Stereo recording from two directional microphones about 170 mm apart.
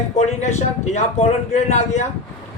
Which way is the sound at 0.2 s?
40° left (ahead or behind).